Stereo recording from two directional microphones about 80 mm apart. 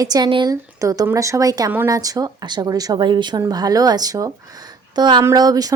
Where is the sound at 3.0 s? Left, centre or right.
Right.